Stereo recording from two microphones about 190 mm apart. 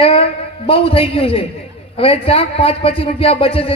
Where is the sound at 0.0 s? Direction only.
30° left (ahead or behind).